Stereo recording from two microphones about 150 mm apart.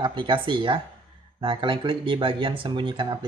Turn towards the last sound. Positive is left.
turn(degrees=-30)  # may be behind; listen again after turning